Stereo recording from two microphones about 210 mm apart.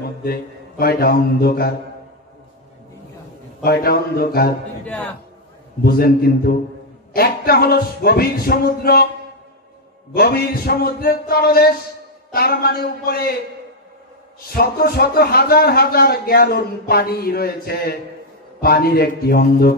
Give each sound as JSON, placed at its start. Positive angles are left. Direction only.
{"t": 0.0, "sound": "a man's voice", "side_deg": 45}
{"t": 3.6, "sound": "a man's voice", "side_deg": 45}
{"t": 4.8, "sound": "a man's voice", "side_deg": 5}
{"t": 5.9, "sound": "a man's voice", "side_deg": 45}
{"t": 10.1, "sound": "a man's voice", "side_deg": 50}
{"t": 14.5, "sound": "a man's voice", "side_deg": 45}